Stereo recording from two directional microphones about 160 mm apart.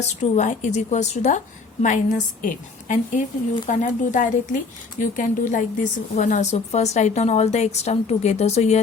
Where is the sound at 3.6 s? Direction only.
50° left (ahead or behind).